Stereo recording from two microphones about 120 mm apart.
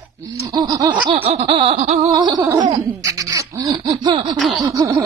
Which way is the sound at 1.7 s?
70° right (ahead or behind).